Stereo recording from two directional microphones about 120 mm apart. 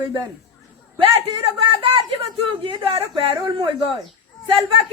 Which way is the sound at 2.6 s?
45° right (ahead or behind).